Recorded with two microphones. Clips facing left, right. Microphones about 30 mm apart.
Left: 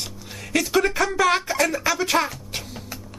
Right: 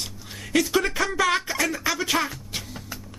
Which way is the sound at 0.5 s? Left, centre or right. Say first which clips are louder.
Left 2 dB; left.